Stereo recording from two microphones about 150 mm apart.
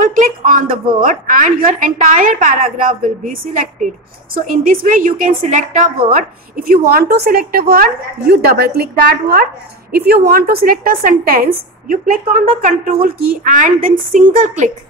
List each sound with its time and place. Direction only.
0.0 s a sound: 65° right (ahead or behind)
1.0 s a woman's voice: 60° right (ahead or behind)
6.1 s a woman's voice: 75° right (ahead or behind)